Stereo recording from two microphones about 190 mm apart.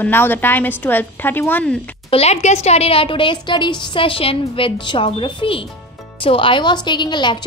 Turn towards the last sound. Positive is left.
turn(degrees=25)  # may be behind; listen again after turning